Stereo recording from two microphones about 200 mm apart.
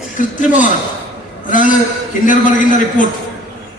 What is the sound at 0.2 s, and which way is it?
A man's voice, 40° left (ahead or behind).